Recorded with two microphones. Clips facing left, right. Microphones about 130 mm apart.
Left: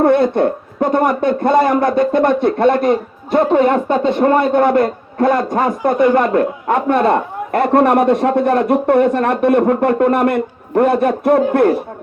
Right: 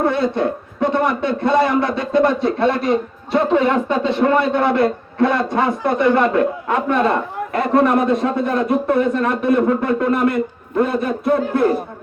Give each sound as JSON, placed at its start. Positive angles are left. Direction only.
{"t": 0.0, "sound": "a man's voice", "side_deg": 55}